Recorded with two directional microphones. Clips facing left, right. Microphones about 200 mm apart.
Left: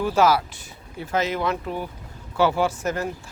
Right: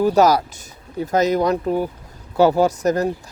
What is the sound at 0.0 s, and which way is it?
Speech, 40° right (ahead or behind).